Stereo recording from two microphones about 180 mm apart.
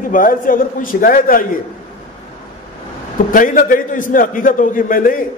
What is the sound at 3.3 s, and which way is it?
A man's voice, 50° left (ahead or behind).